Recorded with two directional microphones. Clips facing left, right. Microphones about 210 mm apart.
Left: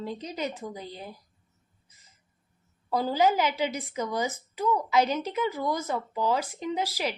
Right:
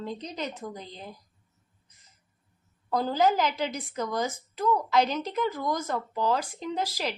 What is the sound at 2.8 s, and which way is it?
Speech, 5° left (ahead or behind).